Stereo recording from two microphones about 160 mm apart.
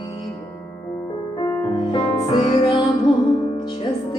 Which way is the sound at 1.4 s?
25° left (ahead or behind).